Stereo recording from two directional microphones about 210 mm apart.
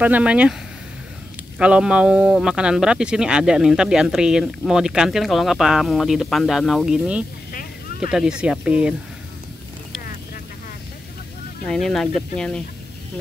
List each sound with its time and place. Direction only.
0.0 s a man's voice: 5° right (ahead or behind)
1.6 s a man's voice: 5° right (ahead or behind)
7.5 s a sound: 45° left (ahead or behind)
8.1 s a man's voice: 5° right (ahead or behind)
11.6 s a man's voice: centre (ahead or behind)